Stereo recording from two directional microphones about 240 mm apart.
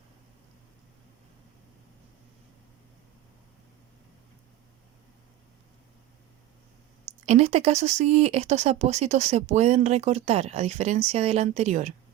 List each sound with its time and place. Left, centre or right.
7.3 s speech: right